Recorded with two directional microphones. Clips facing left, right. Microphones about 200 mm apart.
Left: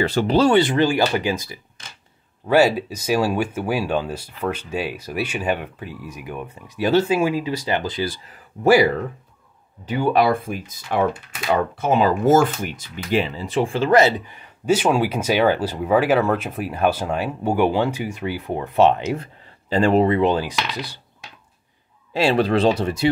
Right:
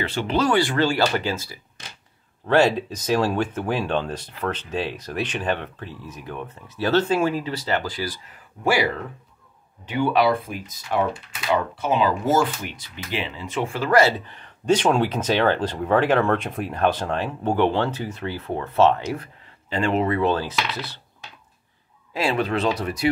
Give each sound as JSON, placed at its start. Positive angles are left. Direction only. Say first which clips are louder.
{"t": 0.0, "sound": "speech", "louder": "left 5 dB", "side_deg": 40}
{"t": 9.8, "sound": "speech", "louder": "left 2 dB", "side_deg": 40}
{"t": 19.7, "sound": "speech", "louder": "left 6 dB", "side_deg": 35}
{"t": 20.1, "sound": "speech", "louder": "left 3 dB", "side_deg": 20}
{"t": 22.1, "sound": "speech", "louder": "left 5 dB", "side_deg": 30}